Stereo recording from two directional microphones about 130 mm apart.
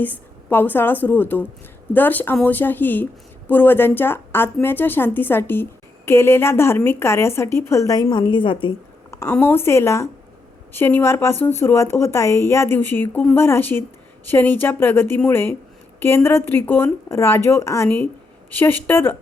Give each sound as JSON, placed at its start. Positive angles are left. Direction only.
{"t": 0.0, "sound": "a woman's voice", "side_deg": 15}
{"t": 9.0, "sound": "a sound", "side_deg": 25}
{"t": 9.3, "sound": "a woman's voice", "side_deg": 15}